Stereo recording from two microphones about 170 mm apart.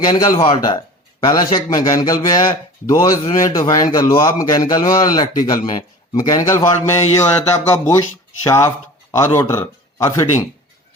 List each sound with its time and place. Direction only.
0.0 s a man's voice: 25° left (ahead or behind)